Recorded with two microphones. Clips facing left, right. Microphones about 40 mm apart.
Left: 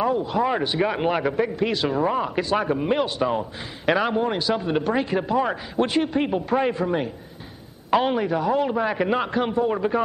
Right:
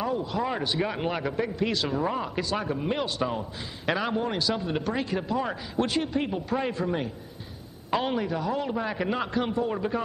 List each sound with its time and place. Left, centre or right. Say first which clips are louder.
0.0 s a man's voice: left 6 dB; left
7.9 s a man's voice: left 6 dB; left